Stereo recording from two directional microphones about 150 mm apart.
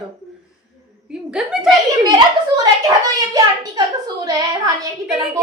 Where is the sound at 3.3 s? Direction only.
25° right (ahead or behind).